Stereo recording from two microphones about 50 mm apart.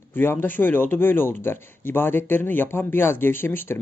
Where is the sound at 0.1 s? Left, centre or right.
Left.